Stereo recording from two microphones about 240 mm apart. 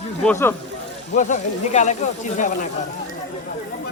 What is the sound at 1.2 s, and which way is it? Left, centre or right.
Speech, left.